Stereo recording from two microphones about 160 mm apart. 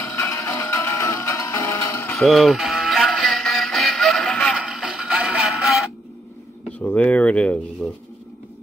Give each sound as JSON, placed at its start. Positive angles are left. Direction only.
{"t": 0.0, "sound": "music", "side_deg": 15}
{"t": 2.1, "sound": "music", "side_deg": 0}
{"t": 6.8, "sound": "speech", "side_deg": 10}